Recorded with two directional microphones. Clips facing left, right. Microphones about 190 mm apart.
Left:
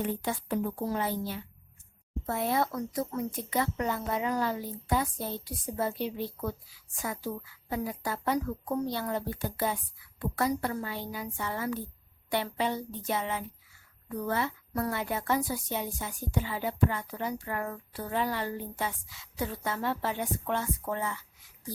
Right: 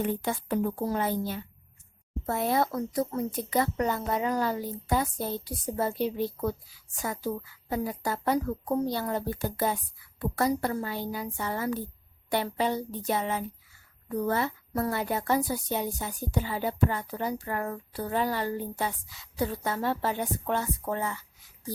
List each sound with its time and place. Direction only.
0.0 s a woman's voice: 50° right (ahead or behind)